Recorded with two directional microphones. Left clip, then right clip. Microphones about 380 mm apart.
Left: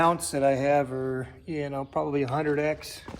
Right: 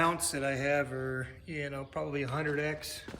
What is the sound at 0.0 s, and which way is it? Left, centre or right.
Speech, centre.